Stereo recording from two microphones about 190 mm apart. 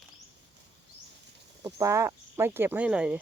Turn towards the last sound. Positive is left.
turn(degrees=-5)  # may be behind; listen again after turning